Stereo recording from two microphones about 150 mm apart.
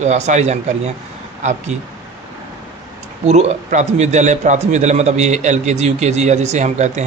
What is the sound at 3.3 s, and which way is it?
Speech, 50° right (ahead or behind).